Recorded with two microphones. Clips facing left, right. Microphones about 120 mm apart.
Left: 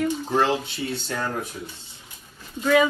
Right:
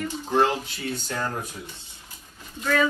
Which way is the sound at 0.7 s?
25° left (ahead or behind).